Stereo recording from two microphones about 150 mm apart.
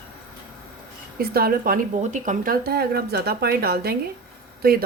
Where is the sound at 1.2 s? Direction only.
90° right.